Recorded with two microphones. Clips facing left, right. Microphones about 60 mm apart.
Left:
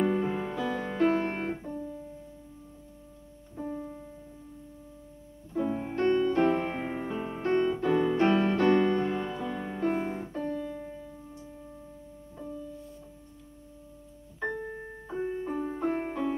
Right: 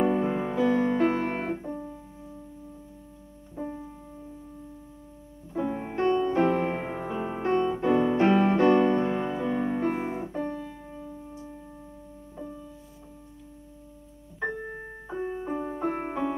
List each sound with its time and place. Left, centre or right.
0.0 s music: centre
1.1 s piano: right
1.7 s keyboard: right
5.5 s music: centre
9.8 s piano: centre
15.0 s keyboard: centre
15.7 s music: centre